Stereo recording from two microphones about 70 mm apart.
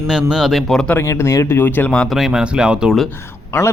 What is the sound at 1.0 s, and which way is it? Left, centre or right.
Speech, left.